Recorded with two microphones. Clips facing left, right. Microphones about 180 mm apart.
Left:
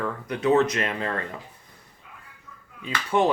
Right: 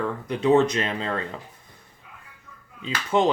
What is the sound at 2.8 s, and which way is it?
Speech, 20° right (ahead or behind).